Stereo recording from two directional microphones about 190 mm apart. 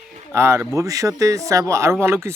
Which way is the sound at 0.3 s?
15° right (ahead or behind).